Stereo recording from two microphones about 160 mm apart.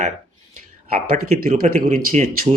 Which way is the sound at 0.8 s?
65° right (ahead or behind).